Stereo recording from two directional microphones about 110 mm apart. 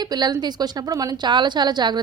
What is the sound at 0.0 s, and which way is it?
A woman's voice, 40° right (ahead or behind).